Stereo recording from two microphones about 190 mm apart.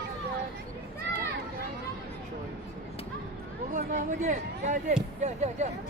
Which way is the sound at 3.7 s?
40° right (ahead or behind).